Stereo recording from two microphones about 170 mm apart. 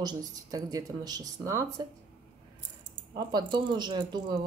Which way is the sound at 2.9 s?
25° right (ahead or behind).